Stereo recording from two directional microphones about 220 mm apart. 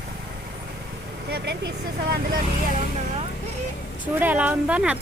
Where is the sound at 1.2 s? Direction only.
50° right (ahead or behind).